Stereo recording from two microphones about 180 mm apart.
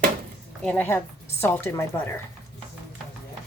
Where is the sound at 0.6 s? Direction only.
10° left (ahead or behind).